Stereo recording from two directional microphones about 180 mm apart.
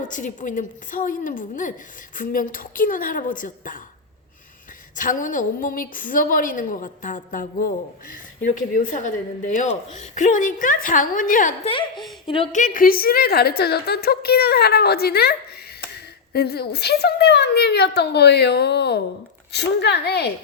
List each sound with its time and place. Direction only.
0.0 s a woman's voice: 45° left (ahead or behind)
4.9 s a woman's voice: 45° left (ahead or behind); by 20.3 s 65° left (ahead or behind)